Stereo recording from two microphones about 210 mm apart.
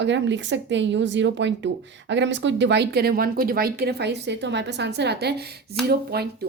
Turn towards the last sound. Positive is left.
turn(degrees=-50)  # may be behind; listen again after turning